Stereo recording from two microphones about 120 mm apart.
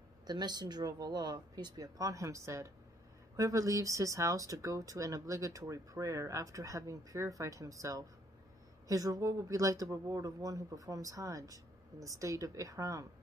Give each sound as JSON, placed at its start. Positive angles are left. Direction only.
{"t": 0.3, "sound": "speech", "side_deg": -35}